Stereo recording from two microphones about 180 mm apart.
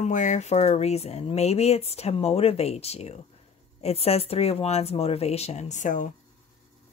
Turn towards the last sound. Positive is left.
turn(degrees=45)  # may be behind; listen again after turning